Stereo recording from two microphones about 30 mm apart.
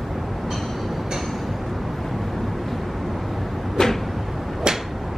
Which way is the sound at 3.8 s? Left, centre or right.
Left.